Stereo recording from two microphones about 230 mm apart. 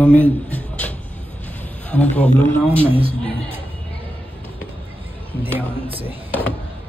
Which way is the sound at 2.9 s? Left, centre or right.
Right.